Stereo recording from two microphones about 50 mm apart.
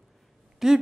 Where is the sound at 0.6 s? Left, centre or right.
Centre.